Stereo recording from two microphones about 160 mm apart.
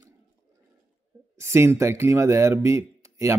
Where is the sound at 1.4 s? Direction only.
15° right (ahead or behind).